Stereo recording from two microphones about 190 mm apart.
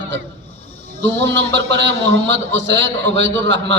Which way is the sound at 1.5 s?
70° right (ahead or behind).